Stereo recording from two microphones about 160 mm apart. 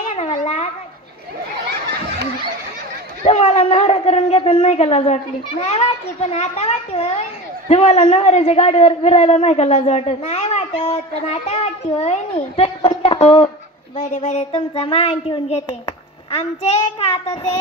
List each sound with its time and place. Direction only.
0.1 s a sound: 45° left (ahead or behind)
3.3 s a man's voice: 45° left (ahead or behind)
17.0 s speech: 35° left (ahead or behind)